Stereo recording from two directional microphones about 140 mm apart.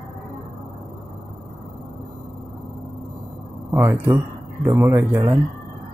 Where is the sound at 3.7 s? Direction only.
15° right (ahead or behind).